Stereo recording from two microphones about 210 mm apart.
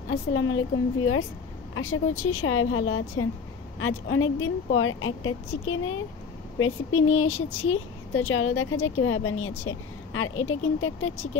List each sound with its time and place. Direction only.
0.1 s speech: 70° left (ahead or behind)
2.2 s speech: 85° left